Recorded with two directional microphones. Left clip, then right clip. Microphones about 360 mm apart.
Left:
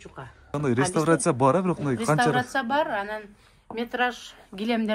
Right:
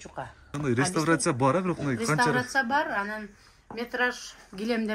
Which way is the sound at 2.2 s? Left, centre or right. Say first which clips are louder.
Left 1 dB; left.